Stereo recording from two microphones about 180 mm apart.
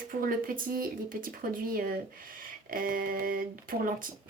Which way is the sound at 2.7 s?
50° right (ahead or behind).